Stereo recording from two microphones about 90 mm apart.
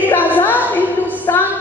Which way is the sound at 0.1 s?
20° left (ahead or behind).